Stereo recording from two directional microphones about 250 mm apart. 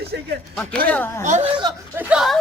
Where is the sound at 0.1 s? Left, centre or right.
Right.